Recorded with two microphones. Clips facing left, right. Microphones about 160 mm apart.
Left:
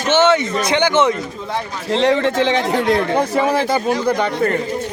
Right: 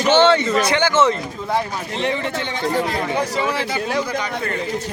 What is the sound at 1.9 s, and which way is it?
A man's voice, 90° left.